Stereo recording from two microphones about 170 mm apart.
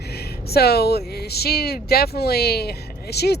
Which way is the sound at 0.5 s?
70° left (ahead or behind).